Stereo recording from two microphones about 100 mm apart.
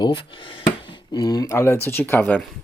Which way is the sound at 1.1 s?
40° left (ahead or behind).